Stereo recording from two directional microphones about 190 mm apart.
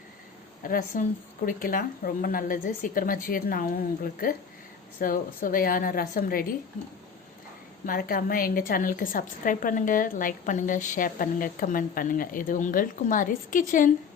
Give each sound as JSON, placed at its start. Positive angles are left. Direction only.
{"t": 0.6, "sound": "a woman's voice", "side_deg": 45}
{"t": 7.9, "sound": "a woman's voice", "side_deg": 50}